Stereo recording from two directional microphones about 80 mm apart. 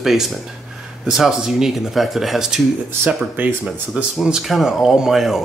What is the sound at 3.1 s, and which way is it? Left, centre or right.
Speech, right.